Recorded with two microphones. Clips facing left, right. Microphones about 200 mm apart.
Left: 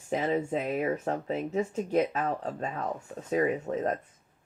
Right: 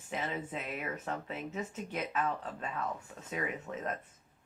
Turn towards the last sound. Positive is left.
turn(degrees=40)  # may be behind; listen again after turning